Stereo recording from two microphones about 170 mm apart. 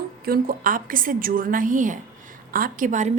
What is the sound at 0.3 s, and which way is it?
A woman's voice, 55° right (ahead or behind).